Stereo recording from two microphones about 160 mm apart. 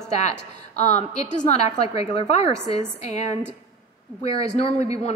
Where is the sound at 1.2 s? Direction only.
45° left (ahead or behind).